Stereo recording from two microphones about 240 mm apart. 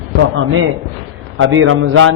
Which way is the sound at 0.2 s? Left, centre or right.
Right.